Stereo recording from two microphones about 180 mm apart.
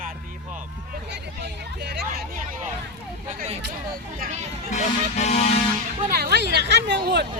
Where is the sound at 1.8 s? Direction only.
65° right (ahead or behind).